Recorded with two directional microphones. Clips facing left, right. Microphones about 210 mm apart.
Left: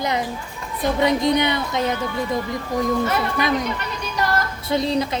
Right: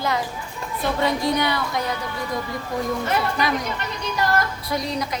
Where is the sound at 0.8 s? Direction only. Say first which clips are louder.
Left 4 dB; 20° left (ahead or behind).